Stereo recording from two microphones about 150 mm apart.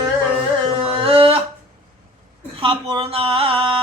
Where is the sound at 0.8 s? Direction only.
40° right (ahead or behind).